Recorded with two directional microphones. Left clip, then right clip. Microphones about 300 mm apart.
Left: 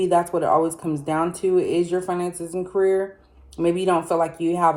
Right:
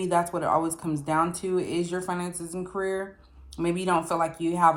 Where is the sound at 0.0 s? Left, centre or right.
Centre.